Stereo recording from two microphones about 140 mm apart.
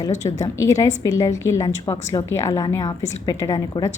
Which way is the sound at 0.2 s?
20° left (ahead or behind).